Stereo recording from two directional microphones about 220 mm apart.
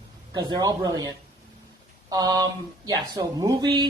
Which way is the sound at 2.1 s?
15° right (ahead or behind).